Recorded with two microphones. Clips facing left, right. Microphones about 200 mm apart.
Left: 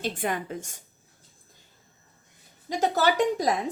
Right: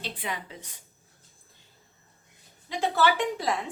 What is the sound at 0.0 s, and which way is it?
Speech, 50° left (ahead or behind).